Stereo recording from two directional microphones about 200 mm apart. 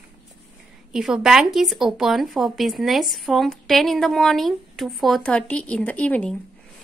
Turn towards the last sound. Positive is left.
turn(degrees=5)  # may be behind; listen again after turning